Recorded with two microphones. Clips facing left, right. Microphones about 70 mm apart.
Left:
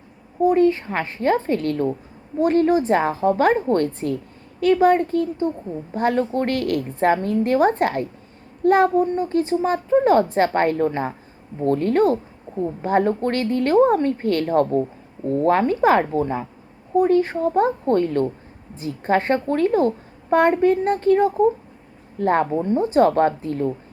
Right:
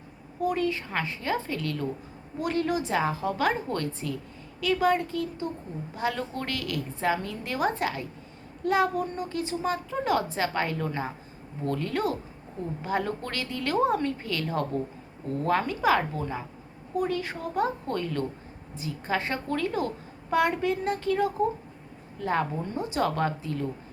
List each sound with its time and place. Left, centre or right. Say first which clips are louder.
0.4 s a woman's voice: left 11 dB; left
22.2 s a woman's voice: left 9 dB; left